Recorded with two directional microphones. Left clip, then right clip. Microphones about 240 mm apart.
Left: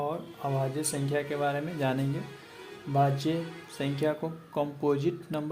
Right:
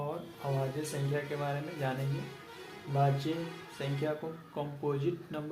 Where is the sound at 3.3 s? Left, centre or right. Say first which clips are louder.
Left 5 dB; left.